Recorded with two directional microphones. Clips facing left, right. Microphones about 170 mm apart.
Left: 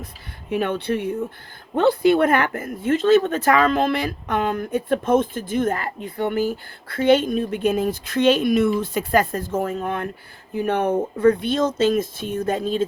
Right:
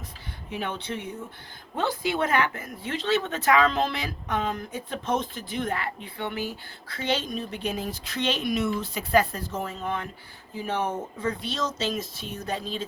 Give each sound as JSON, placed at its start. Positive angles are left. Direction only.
{"t": 0.5, "sound": "speech", "side_deg": 60}